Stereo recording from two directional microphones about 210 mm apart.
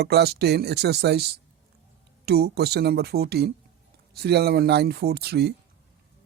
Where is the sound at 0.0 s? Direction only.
50° right (ahead or behind).